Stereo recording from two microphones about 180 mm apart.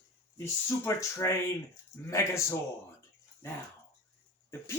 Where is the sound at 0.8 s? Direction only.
15° left (ahead or behind).